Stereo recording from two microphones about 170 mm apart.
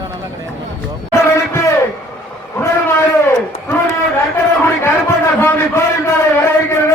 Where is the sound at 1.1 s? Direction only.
15° left (ahead or behind).